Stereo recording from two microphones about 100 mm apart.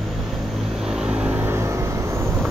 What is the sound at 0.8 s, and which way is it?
Vehicle, 5° right (ahead or behind).